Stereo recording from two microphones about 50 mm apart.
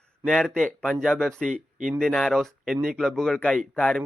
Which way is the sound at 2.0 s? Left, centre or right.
Centre.